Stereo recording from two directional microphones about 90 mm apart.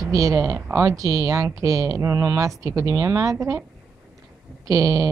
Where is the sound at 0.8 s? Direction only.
40° right (ahead or behind).